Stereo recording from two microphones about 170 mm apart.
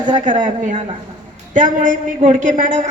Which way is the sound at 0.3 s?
45° right (ahead or behind).